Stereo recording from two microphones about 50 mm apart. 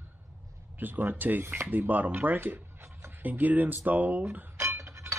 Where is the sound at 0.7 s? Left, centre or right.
Right.